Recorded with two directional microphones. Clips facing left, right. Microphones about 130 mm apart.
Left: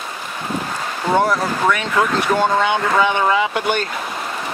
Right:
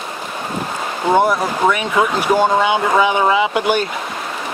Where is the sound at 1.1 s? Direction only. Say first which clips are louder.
Right 2 dB; 10° right (ahead or behind).